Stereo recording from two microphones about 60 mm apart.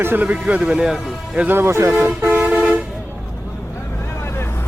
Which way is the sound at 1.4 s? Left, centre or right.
Right.